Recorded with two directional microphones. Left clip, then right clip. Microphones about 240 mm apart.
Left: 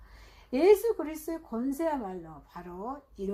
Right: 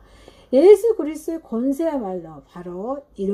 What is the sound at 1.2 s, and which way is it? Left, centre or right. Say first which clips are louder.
A woman's voice: right 10 dB; left.